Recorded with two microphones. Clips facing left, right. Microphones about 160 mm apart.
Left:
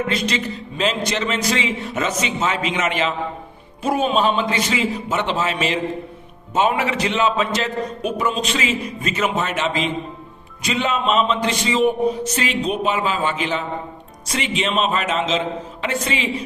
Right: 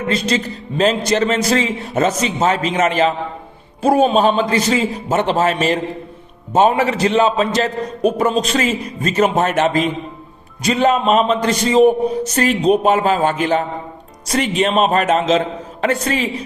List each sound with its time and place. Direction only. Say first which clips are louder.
0.1 s a man's voice: right 4 dB; 40° right (ahead or behind)